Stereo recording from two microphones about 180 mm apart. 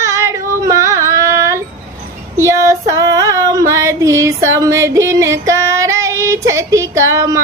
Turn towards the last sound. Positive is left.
turn(degrees=-15)  # may be behind; listen again after turning